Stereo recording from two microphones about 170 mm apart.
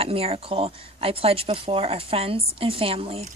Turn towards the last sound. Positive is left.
turn(degrees=-35)  # may be behind; listen again after turning